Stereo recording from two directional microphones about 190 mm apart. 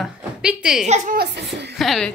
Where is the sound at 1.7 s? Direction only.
Centre (ahead or behind).